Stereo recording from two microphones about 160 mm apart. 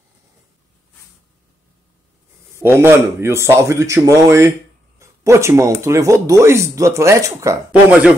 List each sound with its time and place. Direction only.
2.5 s speech: 15° right (ahead or behind)